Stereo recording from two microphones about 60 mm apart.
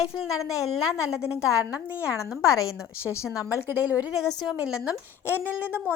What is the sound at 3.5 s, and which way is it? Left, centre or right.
Speech, right.